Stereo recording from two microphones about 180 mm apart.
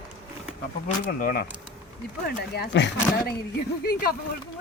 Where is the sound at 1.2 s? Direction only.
55° left (ahead or behind).